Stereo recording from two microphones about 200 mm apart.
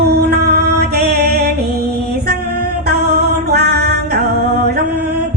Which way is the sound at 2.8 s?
55° right (ahead or behind).